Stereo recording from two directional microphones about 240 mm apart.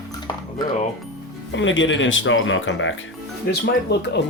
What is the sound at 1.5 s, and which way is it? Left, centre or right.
Speech, left.